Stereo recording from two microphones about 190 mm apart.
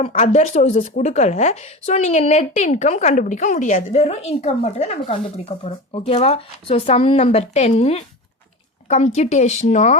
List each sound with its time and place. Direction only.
0.1 s speech: 40° left (ahead or behind)